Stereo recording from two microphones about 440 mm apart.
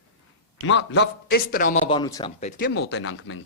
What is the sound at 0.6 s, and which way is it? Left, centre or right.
A man's voice, left.